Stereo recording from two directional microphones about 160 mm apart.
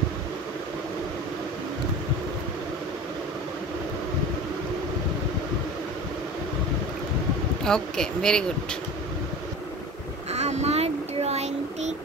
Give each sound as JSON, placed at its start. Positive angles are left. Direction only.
{"t": 7.6, "sound": "speech", "side_deg": 5}
{"t": 10.3, "sound": "child singing", "side_deg": -45}